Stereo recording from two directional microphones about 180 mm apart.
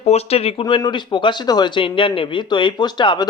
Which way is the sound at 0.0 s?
35° left (ahead or behind).